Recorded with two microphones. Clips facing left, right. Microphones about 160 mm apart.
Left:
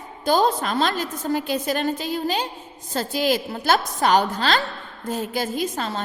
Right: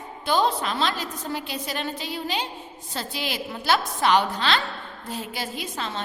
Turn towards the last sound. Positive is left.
turn(degrees=45)  # may be behind; listen again after turning